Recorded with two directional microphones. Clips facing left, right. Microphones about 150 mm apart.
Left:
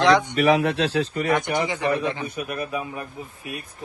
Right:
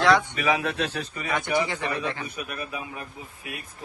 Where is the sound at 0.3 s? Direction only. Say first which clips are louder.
Left 7 dB; 60° left (ahead or behind).